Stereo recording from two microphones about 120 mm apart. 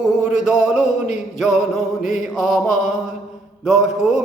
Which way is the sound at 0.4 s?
5° right (ahead or behind).